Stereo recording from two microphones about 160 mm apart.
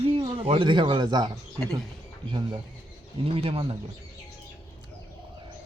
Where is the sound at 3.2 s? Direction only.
35° right (ahead or behind).